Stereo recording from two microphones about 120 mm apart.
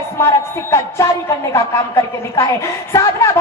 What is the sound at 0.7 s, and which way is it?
A man's voice, 25° left (ahead or behind).